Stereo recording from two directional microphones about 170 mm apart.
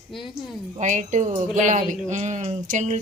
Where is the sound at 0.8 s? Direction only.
45° right (ahead or behind).